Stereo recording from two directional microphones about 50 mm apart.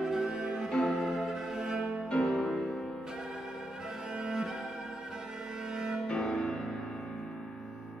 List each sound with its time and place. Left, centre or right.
0.0 s music: centre
2.0 s music: centre
2.5 s music: centre
4.2 s cello: centre
6.0 s music: centre